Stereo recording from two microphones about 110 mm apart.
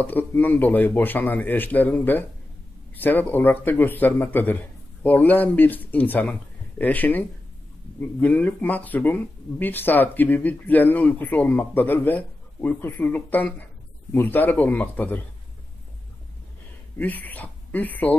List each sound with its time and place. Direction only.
0.0 s speech: 15° left (ahead or behind)
17.0 s speech: 15° left (ahead or behind)